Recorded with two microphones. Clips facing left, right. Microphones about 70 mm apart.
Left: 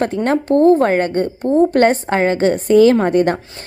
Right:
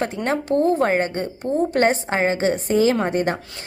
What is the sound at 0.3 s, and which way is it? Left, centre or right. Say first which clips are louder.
A woman's voice: left 7 dB; left.